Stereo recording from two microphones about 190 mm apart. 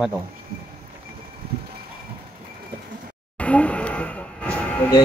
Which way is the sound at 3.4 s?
5° left (ahead or behind).